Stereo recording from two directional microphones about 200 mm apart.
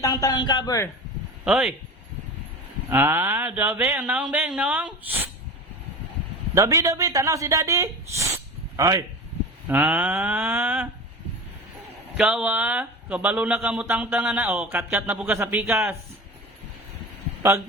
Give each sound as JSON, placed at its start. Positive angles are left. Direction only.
{"t": 0.0, "sound": "a man's voice", "side_deg": 20}
{"t": 1.5, "sound": "speech", "side_deg": -5}
{"t": 2.9, "sound": "speech", "side_deg": -10}
{"t": 6.5, "sound": "speech", "side_deg": -15}
{"t": 12.1, "sound": "speech", "side_deg": -5}